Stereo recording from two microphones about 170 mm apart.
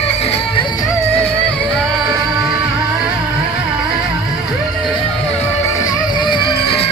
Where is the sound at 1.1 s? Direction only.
10° left (ahead or behind).